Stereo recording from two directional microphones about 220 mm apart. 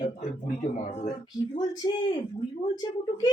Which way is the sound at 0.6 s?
35° left (ahead or behind).